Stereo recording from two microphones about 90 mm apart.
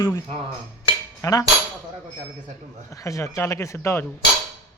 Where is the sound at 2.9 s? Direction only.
35° left (ahead or behind).